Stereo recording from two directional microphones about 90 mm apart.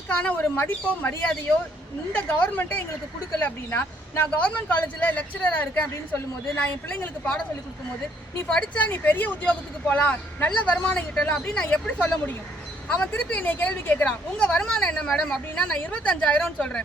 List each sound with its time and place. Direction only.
0.1 s speech: 15° left (ahead or behind)
6.9 s speech: 15° left (ahead or behind)
8.4 s speech: 10° left (ahead or behind)